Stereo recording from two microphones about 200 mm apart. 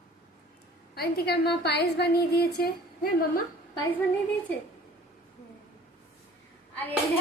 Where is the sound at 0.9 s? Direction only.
50° left (ahead or behind).